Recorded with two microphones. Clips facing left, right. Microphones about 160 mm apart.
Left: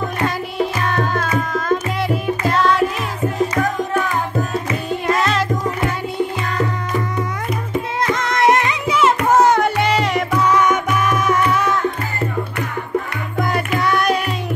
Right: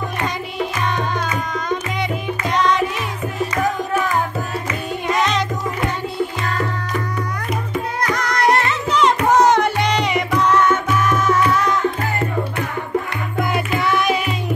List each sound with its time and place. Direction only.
0.8 s music: 5° left (ahead or behind)
5.0 s music: centre (ahead or behind)
8.0 s music: 25° left (ahead or behind)
13.7 s music: centre (ahead or behind)